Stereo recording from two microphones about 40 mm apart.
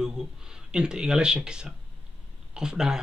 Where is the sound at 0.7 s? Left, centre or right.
Centre.